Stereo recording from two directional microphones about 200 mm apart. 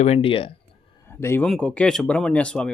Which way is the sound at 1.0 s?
10° left (ahead or behind).